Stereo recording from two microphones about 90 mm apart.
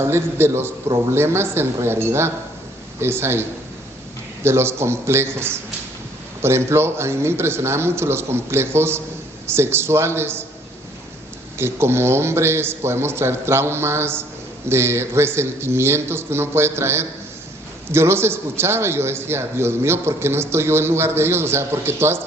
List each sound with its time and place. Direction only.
0.0 s a man's voice: 30° right (ahead or behind)
4.4 s a man's voice: 30° right (ahead or behind)
11.5 s a man's voice: 30° right (ahead or behind)